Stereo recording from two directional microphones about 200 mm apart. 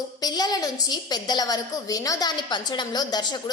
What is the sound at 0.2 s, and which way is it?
A woman's voice, 20° left (ahead or behind).